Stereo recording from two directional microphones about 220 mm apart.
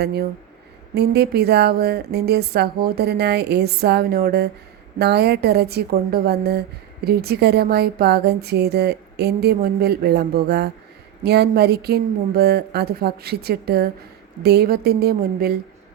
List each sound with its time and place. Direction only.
0.0 s a woman's voice: 45° right (ahead or behind)